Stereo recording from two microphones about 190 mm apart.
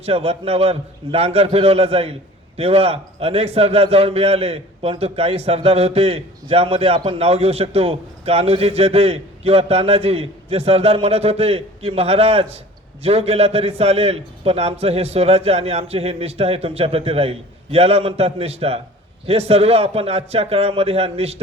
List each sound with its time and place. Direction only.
0.0 s a man's voice: 30° right (ahead or behind)